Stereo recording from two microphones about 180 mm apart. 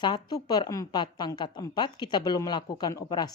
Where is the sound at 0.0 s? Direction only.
25° left (ahead or behind).